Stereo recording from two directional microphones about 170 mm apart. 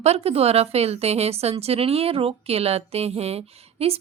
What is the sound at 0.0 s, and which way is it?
A woman's voice, 35° right (ahead or behind).